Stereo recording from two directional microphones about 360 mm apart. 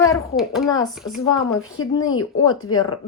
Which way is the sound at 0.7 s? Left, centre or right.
Centre.